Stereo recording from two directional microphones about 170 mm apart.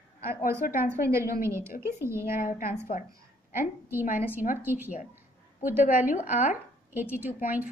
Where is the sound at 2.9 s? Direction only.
50° left (ahead or behind).